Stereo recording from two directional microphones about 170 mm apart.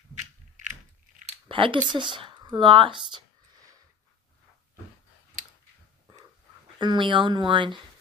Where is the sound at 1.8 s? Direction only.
30° right (ahead or behind).